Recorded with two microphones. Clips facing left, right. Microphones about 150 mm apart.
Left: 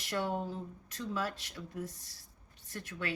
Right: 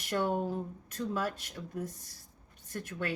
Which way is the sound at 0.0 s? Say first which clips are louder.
Right 4 dB; 50° right (ahead or behind).